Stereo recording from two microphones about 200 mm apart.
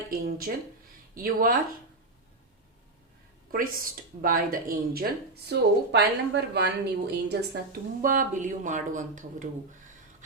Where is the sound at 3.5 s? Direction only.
45° right (ahead or behind).